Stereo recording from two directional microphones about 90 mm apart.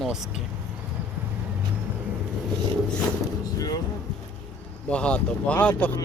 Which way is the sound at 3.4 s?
45° left (ahead or behind).